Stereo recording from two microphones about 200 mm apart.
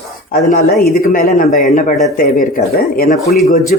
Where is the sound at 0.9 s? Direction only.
45° left (ahead or behind).